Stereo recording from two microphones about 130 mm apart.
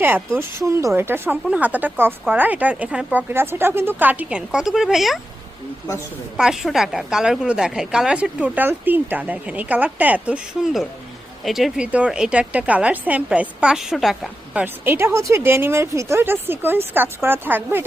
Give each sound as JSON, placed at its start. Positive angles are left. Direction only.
{"t": 0.0, "sound": "a woman's voice", "side_deg": -20}
{"t": 6.3, "sound": "a woman's voice", "side_deg": -5}
{"t": 14.6, "sound": "a woman's voice", "side_deg": -20}